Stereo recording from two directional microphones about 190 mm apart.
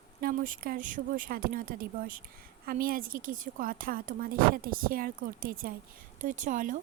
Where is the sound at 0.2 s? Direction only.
50° right (ahead or behind).